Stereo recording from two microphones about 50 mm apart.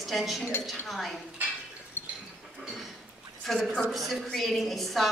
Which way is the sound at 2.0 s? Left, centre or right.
Left.